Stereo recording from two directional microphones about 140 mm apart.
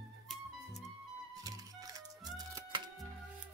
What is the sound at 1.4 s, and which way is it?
Music, 25° right (ahead or behind).